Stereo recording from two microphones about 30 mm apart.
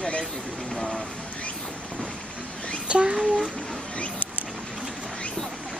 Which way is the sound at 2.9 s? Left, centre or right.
Right.